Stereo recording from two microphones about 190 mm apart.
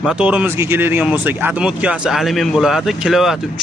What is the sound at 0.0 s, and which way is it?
Speech, 5° right (ahead or behind).